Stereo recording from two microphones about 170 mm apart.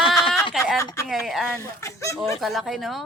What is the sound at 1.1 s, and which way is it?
Speech, centre (ahead or behind).